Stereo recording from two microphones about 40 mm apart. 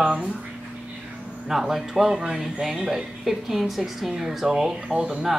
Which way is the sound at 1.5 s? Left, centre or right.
Centre.